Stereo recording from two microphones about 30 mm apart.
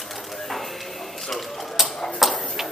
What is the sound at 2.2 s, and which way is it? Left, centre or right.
Tick-tock, centre.